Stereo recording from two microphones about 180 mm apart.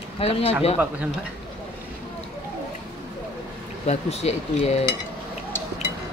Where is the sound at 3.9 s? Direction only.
35° left (ahead or behind).